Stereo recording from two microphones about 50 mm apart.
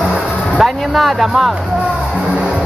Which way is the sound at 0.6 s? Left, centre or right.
Centre.